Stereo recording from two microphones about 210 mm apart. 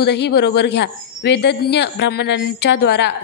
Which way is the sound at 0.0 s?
50° left (ahead or behind).